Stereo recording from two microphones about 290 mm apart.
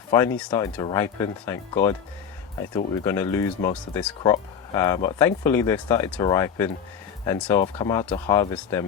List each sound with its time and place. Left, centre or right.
0.3 s speech: centre